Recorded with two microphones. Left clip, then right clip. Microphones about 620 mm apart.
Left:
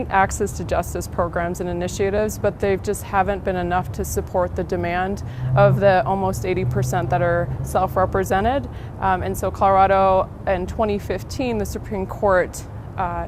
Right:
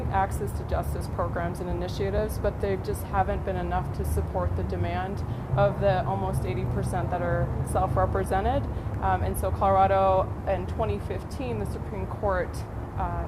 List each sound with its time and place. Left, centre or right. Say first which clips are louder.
0.1 s speech: left 9 dB; left
0.7 s speech: left 9 dB; left